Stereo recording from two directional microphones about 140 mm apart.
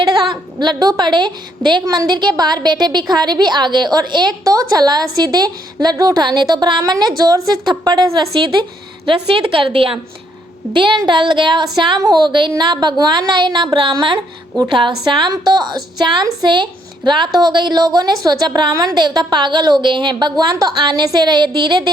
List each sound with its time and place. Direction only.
0.0 s a woman's voice: 30° right (ahead or behind)
9.0 s a woman's voice: 40° right (ahead or behind)
10.8 s a woman's voice: 35° right (ahead or behind)